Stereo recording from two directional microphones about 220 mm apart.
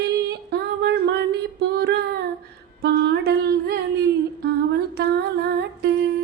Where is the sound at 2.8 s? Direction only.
45° right (ahead or behind).